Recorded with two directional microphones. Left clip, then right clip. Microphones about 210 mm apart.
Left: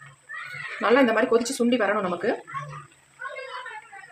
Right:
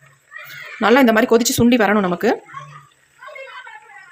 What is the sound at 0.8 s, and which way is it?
Speech, 45° right (ahead or behind).